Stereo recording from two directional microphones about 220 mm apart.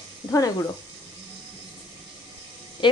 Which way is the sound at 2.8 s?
20° left (ahead or behind).